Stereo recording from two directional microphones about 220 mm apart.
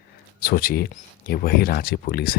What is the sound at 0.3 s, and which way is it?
Speech, 45° left (ahead or behind).